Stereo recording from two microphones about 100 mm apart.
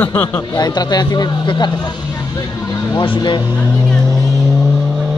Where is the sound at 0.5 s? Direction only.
45° left (ahead or behind).